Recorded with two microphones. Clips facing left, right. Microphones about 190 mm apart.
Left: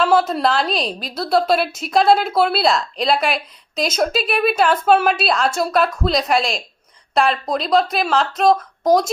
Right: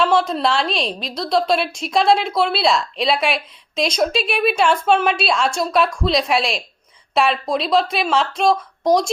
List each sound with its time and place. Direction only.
0.0 s a woman's voice: 5° left (ahead or behind)